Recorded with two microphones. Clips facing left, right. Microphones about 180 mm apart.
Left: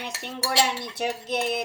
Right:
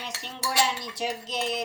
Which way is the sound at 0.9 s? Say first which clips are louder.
Left 4 dB; 60° left (ahead or behind).